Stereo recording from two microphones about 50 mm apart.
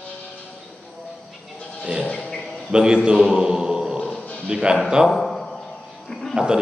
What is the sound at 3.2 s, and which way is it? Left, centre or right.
Music, centre.